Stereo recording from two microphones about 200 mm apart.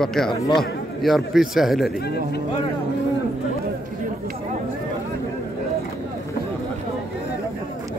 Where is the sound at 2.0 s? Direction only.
55° left (ahead or behind).